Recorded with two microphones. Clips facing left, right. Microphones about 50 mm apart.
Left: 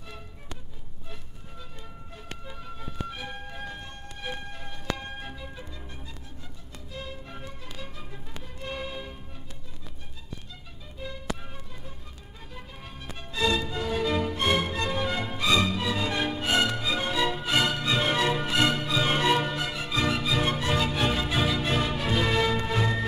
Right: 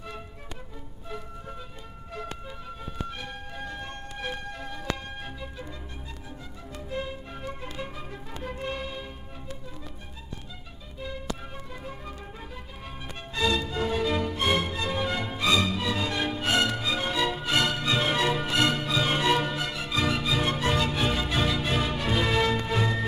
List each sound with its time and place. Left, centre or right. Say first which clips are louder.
2.4 s music: right 1 dB; centre
7.1 s music: right 2 dB; centre
7.4 s music: right 6 dB; right
8.6 s music: left 2 dB; centre
13.3 s music: even; centre
13.7 s music: right 2 dB; centre
14.0 s music: even; centre